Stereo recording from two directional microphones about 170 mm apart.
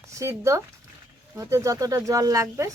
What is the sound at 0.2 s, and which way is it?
Speech, 15° right (ahead or behind).